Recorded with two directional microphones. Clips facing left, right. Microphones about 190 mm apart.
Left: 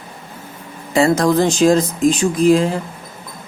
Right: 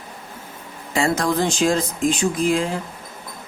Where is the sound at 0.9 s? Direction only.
40° left (ahead or behind).